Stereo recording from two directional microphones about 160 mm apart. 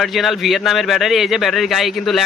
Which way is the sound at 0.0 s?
Centre (ahead or behind).